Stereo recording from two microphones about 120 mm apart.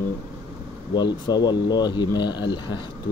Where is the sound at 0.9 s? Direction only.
35° left (ahead or behind).